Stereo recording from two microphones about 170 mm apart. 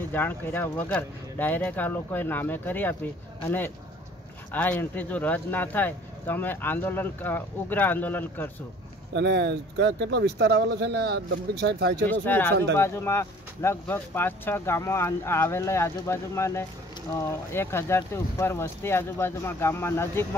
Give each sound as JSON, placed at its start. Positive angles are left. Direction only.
{"t": 0.1, "sound": "speech", "side_deg": 10}
{"t": 9.1, "sound": "speech", "side_deg": -85}
{"t": 12.1, "sound": "speech", "side_deg": 10}